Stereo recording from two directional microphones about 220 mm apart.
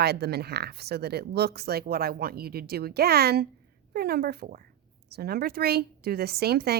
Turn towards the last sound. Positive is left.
turn(degrees=-45)  # may be behind; listen again after turning